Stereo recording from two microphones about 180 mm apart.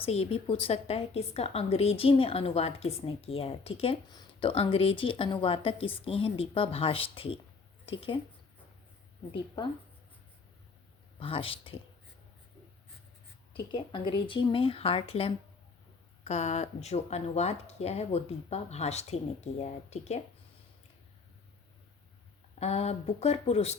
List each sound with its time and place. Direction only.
0.0 s a woman's voice: 35° left (ahead or behind)
11.2 s a woman's voice: 30° left (ahead or behind)
13.7 s a woman's voice: 25° left (ahead or behind)
22.6 s a woman's voice: 35° left (ahead or behind)